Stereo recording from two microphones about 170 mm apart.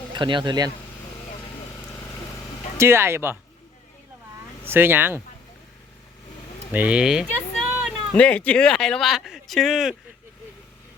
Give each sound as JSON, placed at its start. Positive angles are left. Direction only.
{"t": 0.1, "sound": "speech", "side_deg": -30}
{"t": 2.7, "sound": "speech", "side_deg": -15}
{"t": 4.6, "sound": "speech", "side_deg": -15}
{"t": 6.7, "sound": "speech", "side_deg": -5}